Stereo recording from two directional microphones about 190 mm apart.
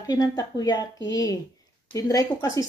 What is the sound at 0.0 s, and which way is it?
A woman's voice, 20° left (ahead or behind).